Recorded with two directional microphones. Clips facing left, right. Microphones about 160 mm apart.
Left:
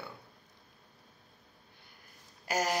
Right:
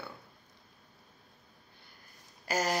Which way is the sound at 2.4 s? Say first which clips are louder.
Even; 15° left (ahead or behind).